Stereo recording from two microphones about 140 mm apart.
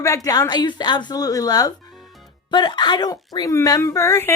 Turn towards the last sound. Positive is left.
turn(degrees=20)  # may be behind; listen again after turning